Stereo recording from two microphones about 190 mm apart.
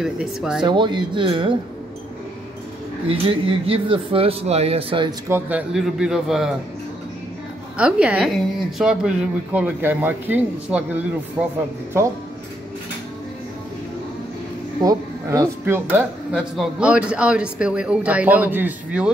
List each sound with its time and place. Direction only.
0.0 s a man's voice: 5° right (ahead or behind)
0.7 s speech: 25° right (ahead or behind)
3.1 s speech: 30° right (ahead or behind)
5.3 s a man's voice: 10° right (ahead or behind)
7.7 s speech: 5° right (ahead or behind)
14.8 s speech: 15° right (ahead or behind)